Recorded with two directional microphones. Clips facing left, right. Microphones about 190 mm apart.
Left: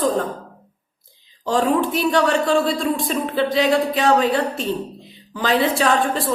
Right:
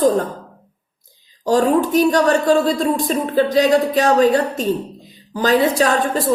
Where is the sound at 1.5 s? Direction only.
40° right (ahead or behind).